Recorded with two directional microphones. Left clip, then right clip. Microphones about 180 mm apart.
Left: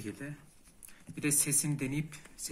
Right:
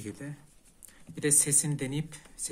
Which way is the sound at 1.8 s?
45° right (ahead or behind).